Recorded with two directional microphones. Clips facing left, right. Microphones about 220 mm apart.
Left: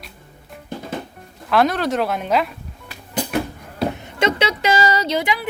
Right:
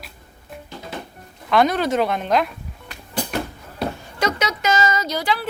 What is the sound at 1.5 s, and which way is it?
A woman's voice, centre (ahead or behind).